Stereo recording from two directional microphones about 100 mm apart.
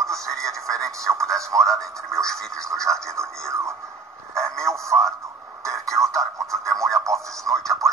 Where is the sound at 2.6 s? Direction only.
30° right (ahead or behind).